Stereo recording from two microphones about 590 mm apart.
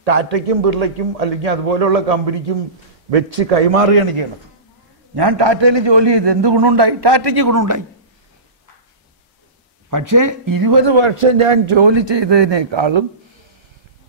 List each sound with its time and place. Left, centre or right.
0.0 s a man's voice: right
5.1 s a man's voice: right
9.8 s a man's voice: right